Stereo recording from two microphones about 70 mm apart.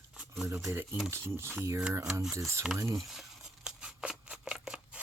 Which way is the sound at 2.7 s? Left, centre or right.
Right.